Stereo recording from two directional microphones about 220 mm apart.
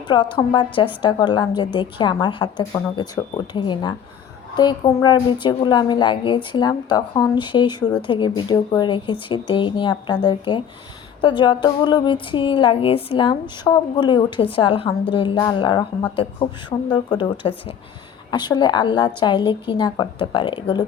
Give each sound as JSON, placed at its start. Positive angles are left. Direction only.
{"t": 0.1, "sound": "a woman's voice", "side_deg": 20}